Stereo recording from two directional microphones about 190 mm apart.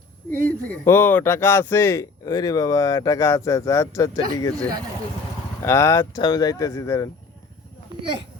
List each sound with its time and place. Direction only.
0.3 s speech: 50° right (ahead or behind)
0.7 s speech: 10° left (ahead or behind)
5.6 s speech: 15° left (ahead or behind)